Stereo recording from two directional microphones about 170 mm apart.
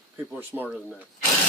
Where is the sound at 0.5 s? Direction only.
15° right (ahead or behind).